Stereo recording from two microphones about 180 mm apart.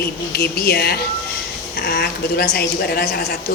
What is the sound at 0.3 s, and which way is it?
A woman's voice, 65° left (ahead or behind).